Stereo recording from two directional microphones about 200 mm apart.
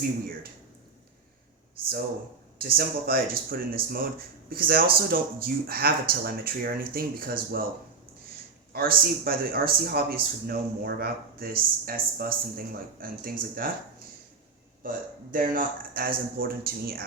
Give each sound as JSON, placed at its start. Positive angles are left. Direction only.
{"t": 2.6, "sound": "speech", "side_deg": -50}
{"t": 8.7, "sound": "speech", "side_deg": -50}
{"t": 14.8, "sound": "speech", "side_deg": -45}